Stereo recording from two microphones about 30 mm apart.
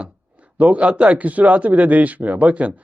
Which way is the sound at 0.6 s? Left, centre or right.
Right.